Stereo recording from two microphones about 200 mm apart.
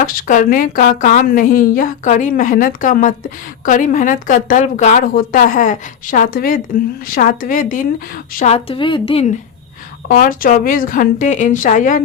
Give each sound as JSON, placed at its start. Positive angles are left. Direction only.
{"t": 0.0, "sound": "a woman's voice", "side_deg": 45}
{"t": 8.4, "sound": "a woman's voice", "side_deg": 30}
{"t": 10.1, "sound": "a woman's voice", "side_deg": 45}